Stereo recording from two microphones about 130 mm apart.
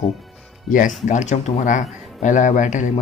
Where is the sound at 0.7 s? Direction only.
90° left.